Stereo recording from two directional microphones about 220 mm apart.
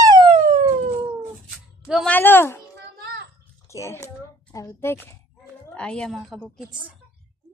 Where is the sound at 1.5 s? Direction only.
Centre (ahead or behind).